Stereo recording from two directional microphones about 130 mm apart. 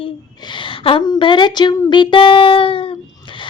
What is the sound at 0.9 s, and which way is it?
Child singing, 40° left (ahead or behind).